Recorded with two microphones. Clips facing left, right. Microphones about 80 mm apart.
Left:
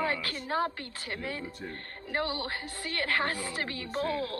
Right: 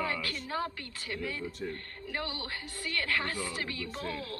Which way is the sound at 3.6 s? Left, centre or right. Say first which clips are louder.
Left 5 dB; left.